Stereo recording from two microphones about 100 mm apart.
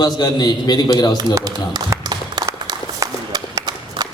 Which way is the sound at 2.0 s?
40° right (ahead or behind).